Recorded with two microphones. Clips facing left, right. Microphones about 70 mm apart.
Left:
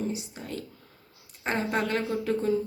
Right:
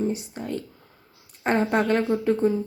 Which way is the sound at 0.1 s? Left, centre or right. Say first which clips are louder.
Right 6 dB; right.